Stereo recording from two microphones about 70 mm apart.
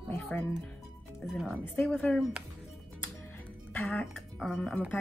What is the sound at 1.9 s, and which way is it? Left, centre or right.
Speech, centre.